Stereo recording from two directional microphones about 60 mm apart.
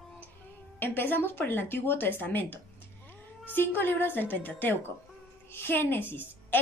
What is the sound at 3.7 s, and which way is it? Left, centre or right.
A woman's voice, left.